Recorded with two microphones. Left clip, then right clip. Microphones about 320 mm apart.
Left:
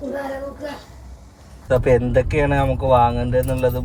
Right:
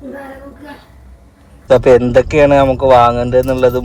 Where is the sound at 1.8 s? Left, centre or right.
Right.